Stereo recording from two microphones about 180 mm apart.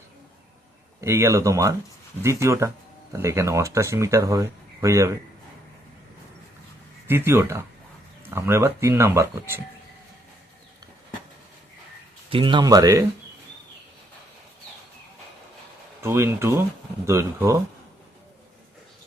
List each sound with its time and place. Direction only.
1.0 s speech: 15° right (ahead or behind)
7.1 s speech: 15° right (ahead or behind)
12.3 s speech: 30° right (ahead or behind)
16.0 s speech: 15° right (ahead or behind)